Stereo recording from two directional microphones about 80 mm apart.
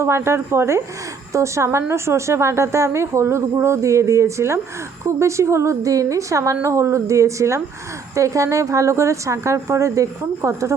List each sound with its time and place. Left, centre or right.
0.0 s speech: right